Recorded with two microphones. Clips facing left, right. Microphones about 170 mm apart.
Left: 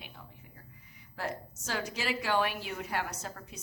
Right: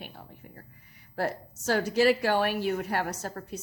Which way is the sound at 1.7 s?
55° right (ahead or behind).